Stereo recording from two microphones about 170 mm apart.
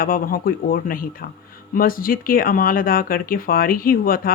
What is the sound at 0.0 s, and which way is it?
Speech, 55° left (ahead or behind).